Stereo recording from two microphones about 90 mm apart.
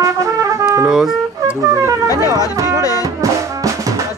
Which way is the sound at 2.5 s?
40° right (ahead or behind).